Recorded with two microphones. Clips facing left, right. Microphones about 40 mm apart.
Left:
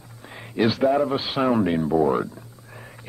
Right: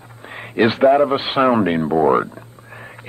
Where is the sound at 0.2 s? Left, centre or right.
Right.